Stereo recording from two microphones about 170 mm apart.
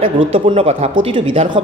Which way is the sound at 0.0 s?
35° right (ahead or behind).